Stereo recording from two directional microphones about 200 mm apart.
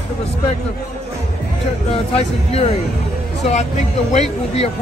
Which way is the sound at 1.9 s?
30° left (ahead or behind).